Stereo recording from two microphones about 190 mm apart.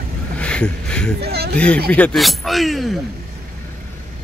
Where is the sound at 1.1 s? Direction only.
55° right (ahead or behind).